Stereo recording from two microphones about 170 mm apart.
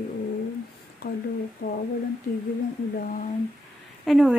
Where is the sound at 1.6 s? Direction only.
90° left.